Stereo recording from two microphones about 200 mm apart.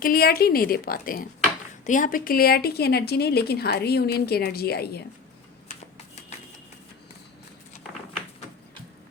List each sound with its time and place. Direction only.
0.0 s speech: 50° left (ahead or behind)